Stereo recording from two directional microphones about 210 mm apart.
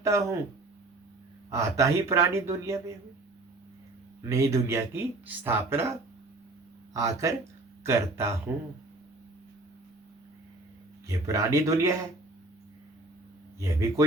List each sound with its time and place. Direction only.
0.0 s speech: 15° right (ahead or behind)
1.5 s speech: 15° right (ahead or behind)
4.2 s speech: 15° right (ahead or behind)
11.3 s speech: 15° right (ahead or behind)
13.6 s speech: 15° right (ahead or behind)